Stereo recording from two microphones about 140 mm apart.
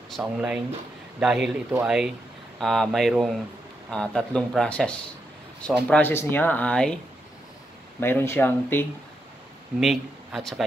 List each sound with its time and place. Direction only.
0.1 s speech: 5° right (ahead or behind)
8.0 s speech: 15° left (ahead or behind)
9.8 s speech: centre (ahead or behind)